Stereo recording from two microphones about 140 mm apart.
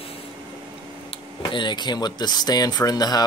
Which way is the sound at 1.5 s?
35° left (ahead or behind).